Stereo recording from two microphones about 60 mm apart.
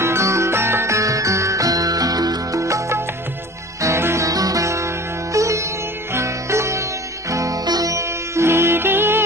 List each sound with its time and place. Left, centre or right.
0.0 s music: right
4.3 s music: right
7.2 s music: right
8.4 s music: right